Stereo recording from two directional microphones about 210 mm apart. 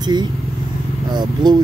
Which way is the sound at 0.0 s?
20° right (ahead or behind).